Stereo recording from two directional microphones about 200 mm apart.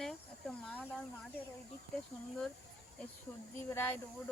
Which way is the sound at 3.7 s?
10° left (ahead or behind).